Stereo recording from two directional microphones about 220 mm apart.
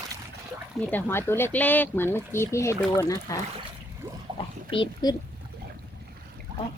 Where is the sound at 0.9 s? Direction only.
10° left (ahead or behind).